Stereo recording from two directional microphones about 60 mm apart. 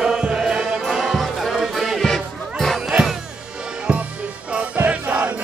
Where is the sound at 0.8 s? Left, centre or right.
Centre.